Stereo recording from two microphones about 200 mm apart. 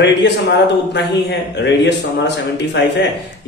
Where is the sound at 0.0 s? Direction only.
60° left (ahead or behind).